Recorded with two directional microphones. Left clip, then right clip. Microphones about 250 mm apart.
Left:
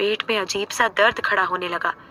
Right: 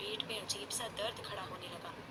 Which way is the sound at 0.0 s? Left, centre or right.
Left.